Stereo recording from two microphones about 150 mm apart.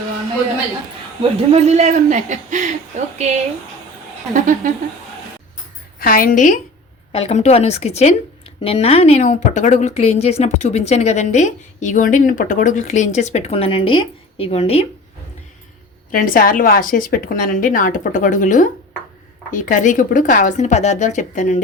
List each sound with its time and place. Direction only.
1.2 s speech: 45° right (ahead or behind)
4.6 s a woman's voice: 60° right (ahead or behind)
6.0 s a woman's voice: 70° left (ahead or behind)
7.1 s speech: 45° left (ahead or behind)
16.1 s a woman's voice: 70° left (ahead or behind)